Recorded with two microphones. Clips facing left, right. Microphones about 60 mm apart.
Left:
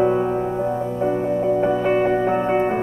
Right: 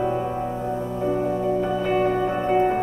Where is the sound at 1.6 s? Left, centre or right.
Left.